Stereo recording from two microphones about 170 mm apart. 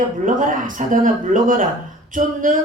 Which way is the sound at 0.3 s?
50° right (ahead or behind).